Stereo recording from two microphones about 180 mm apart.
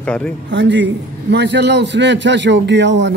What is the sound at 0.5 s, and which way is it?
A man's voice, 80° right.